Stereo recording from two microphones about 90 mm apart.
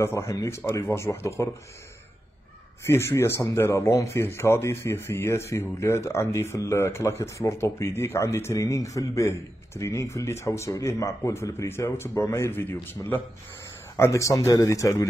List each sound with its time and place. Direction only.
0.0 s speech: 30° left (ahead or behind)
2.8 s speech: 30° left (ahead or behind)